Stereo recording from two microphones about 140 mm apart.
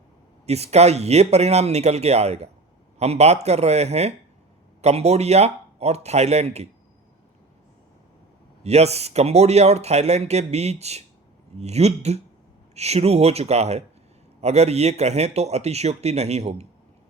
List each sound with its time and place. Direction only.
0.4 s speech: 50° right (ahead or behind)
8.6 s speech: 50° right (ahead or behind)